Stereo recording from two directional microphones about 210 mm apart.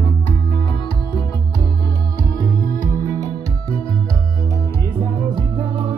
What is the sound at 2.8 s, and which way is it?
Music, 35° left (ahead or behind).